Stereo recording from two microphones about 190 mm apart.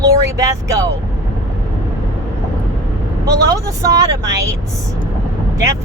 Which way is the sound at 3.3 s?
15° right (ahead or behind).